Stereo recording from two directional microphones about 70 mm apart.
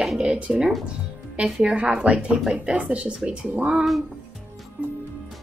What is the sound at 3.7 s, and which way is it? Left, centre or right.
Speech, centre.